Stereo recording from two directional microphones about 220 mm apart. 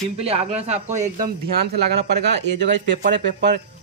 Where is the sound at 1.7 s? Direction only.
50° right (ahead or behind).